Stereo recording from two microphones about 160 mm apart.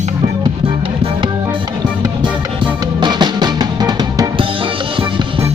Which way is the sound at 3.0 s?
25° right (ahead or behind).